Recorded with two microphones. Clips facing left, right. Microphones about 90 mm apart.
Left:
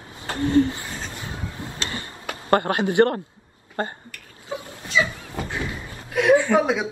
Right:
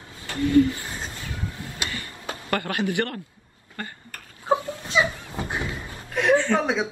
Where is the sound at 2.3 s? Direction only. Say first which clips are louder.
Left 7 dB; 30° left (ahead or behind).